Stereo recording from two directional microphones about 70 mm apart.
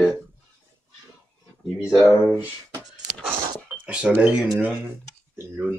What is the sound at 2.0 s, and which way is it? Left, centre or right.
Speech, left.